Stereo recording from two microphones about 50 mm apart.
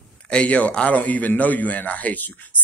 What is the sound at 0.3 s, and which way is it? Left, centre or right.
A man's voice, left.